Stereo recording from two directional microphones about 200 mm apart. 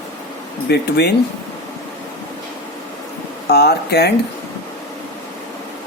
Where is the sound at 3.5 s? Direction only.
55° left (ahead or behind).